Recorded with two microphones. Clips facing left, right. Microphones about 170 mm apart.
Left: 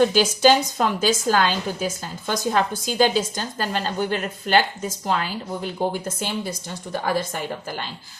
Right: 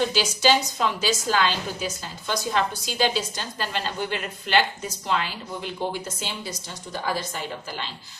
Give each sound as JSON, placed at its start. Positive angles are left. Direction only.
{"t": 0.0, "sound": "a woman's voice", "side_deg": 50}